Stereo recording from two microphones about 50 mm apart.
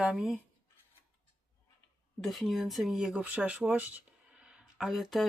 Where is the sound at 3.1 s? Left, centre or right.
Right.